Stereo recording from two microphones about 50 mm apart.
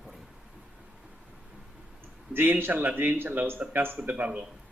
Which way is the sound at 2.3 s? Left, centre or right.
Right.